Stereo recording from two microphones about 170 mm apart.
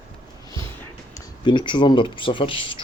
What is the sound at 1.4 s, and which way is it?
Speech, 30° left (ahead or behind).